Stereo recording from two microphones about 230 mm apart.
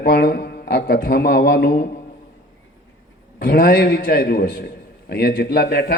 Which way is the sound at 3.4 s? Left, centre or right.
Left.